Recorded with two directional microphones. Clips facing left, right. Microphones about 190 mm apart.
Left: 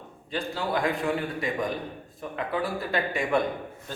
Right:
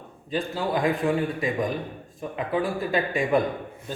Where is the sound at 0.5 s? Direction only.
20° right (ahead or behind).